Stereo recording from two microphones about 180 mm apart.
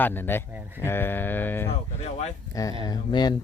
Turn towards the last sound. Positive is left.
turn(degrees=25)  # may be behind; listen again after turning